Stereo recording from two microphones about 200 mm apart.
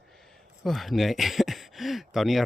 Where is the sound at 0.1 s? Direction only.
Centre (ahead or behind).